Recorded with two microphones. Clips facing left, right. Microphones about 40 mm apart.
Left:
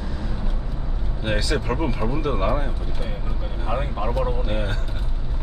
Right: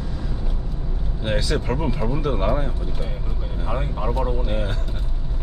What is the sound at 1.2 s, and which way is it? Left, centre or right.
Vehicle, centre.